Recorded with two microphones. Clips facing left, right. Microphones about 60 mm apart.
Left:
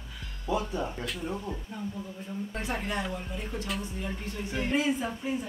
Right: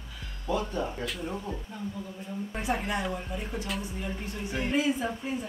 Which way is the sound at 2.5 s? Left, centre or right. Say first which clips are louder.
Right 4 dB; centre.